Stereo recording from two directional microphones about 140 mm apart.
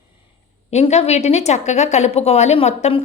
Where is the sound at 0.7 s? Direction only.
50° left (ahead or behind).